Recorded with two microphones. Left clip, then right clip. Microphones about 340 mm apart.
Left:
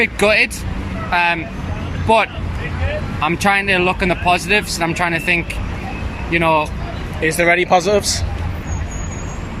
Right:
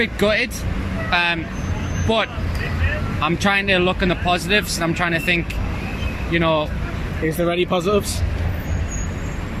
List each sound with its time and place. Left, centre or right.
0.0 s speech: centre
7.4 s speech: left
7.7 s speech: centre